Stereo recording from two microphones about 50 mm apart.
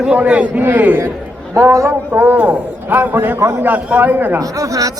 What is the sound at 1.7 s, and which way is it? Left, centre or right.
Speech, right.